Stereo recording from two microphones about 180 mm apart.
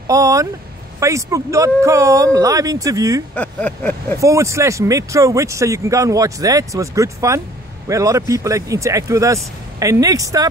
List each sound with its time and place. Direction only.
0.0 s speech: 20° right (ahead or behind)
3.3 s vehicle: 10° left (ahead or behind)
4.2 s speech: 15° right (ahead or behind)